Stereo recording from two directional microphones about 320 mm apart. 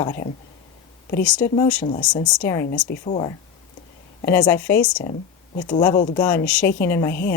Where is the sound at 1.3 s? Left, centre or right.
Centre.